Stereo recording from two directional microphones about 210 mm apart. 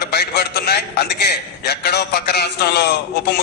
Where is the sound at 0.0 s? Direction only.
50° left (ahead or behind).